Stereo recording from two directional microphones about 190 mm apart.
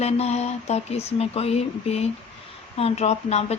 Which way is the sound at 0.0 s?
35° left (ahead or behind).